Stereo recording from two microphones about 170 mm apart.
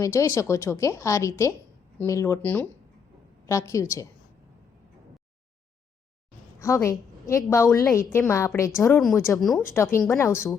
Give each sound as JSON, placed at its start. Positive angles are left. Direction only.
{"t": 0.0, "sound": "a woman's voice", "side_deg": 15}
{"t": 6.6, "sound": "a woman's voice", "side_deg": 20}
{"t": 9.0, "sound": "speech", "side_deg": 0}
{"t": 9.7, "sound": "a woman's voice", "side_deg": 15}